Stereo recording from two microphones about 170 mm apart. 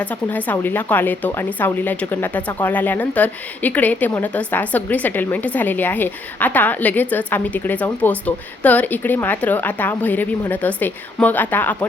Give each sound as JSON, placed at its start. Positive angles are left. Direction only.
{"t": 0.0, "sound": "speech", "side_deg": 10}